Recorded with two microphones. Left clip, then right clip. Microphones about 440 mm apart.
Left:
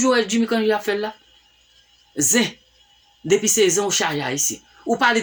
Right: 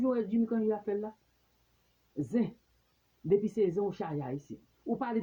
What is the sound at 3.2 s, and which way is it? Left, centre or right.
Speech, right.